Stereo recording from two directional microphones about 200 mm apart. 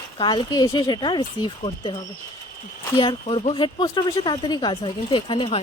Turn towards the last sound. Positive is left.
turn(degrees=25)  # may be behind; listen again after turning